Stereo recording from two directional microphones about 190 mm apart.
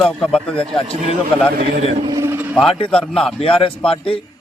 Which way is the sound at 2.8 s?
5° left (ahead or behind).